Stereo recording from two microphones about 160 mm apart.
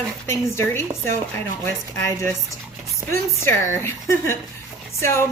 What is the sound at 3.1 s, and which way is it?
A woman's voice, 15° left (ahead or behind).